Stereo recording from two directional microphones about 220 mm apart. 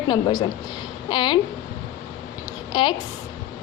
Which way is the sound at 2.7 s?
20° left (ahead or behind).